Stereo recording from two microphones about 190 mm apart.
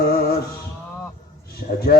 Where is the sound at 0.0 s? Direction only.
55° left (ahead or behind).